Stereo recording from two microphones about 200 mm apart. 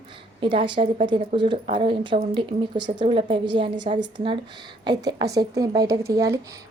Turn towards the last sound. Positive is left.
turn(degrees=-15)  # may be behind; listen again after turning